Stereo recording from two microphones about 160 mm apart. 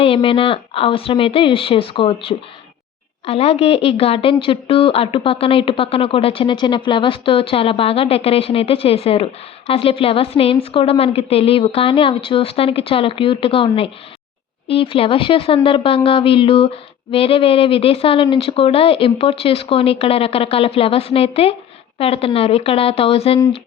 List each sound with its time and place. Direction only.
0.0 s a woman's voice: 35° left (ahead or behind)